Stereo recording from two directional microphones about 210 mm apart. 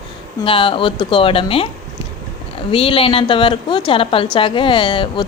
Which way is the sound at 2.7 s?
25° left (ahead or behind).